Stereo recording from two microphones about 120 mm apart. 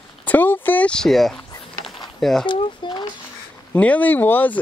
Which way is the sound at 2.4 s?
45° left (ahead or behind).